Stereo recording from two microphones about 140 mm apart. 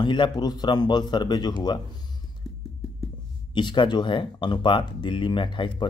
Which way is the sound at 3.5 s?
35° left (ahead or behind).